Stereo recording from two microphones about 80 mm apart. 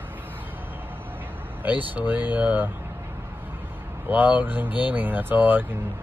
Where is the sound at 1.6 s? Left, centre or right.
Right.